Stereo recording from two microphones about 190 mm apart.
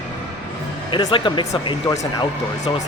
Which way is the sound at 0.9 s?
25° left (ahead or behind).